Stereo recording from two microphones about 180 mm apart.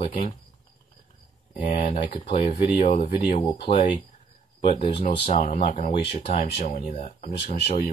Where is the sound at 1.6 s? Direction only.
45° left (ahead or behind).